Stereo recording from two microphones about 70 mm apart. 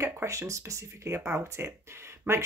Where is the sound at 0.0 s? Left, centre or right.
Right.